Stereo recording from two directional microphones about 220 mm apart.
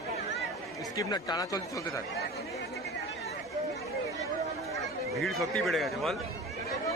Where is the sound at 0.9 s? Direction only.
15° left (ahead or behind).